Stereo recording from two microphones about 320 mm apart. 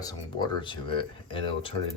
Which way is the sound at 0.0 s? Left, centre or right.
Centre.